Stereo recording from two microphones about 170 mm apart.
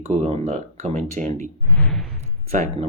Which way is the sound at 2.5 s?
40° right (ahead or behind).